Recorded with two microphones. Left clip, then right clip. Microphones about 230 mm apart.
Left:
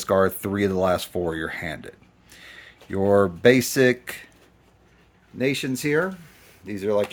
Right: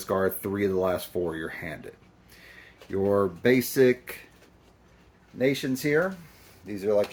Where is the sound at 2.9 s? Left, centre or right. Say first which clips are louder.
Left 5 dB; left.